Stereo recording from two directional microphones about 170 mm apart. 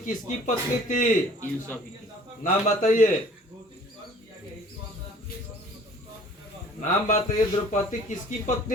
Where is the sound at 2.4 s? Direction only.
50° left (ahead or behind).